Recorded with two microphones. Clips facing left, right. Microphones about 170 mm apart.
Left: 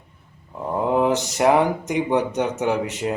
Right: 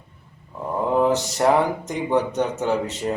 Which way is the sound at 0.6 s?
15° left (ahead or behind).